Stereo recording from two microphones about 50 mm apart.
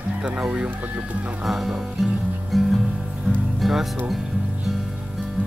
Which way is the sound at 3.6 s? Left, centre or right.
Centre.